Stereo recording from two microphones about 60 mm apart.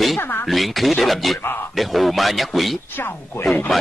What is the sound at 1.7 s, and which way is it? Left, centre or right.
Speech, centre.